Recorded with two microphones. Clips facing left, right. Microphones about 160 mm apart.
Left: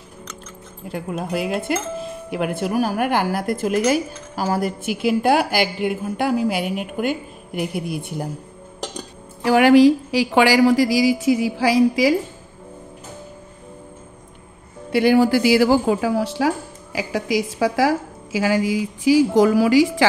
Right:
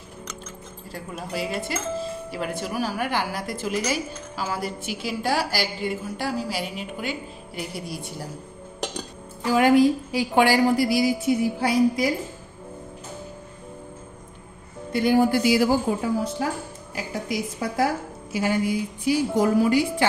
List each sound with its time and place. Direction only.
0.8 s speech: 60° left (ahead or behind)
9.4 s a woman's voice: 75° left (ahead or behind); by 12.2 s 90° left
14.9 s a woman's voice: 80° left